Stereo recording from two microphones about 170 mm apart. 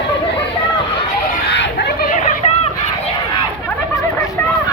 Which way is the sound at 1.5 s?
80° left.